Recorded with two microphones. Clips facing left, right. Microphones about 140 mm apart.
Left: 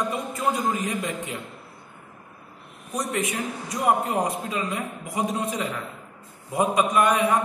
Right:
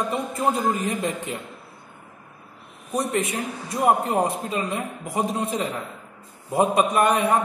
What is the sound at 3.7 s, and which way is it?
A man's voice, 30° right (ahead or behind).